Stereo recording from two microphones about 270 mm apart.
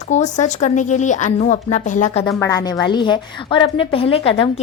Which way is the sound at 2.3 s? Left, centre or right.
Centre.